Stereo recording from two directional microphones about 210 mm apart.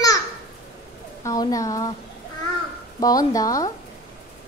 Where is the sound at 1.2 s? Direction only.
15° left (ahead or behind).